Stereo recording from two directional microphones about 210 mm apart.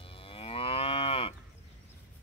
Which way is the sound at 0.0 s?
25° left (ahead or behind).